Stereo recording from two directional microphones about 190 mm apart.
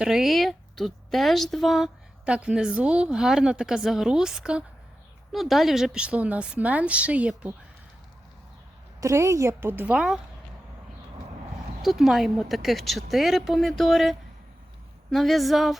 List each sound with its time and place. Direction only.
0.0 s a woman's voice: centre (ahead or behind)
9.0 s a woman's voice: 15° right (ahead or behind)
11.8 s a woman's voice: centre (ahead or behind)